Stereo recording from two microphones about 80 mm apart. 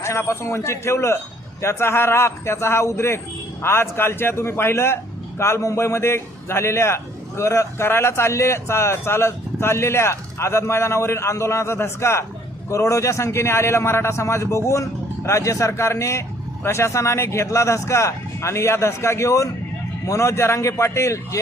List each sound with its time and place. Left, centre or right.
0.0 s a man's voice: left